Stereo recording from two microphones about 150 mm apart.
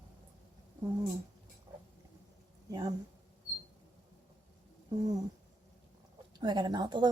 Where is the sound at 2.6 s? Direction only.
25° right (ahead or behind).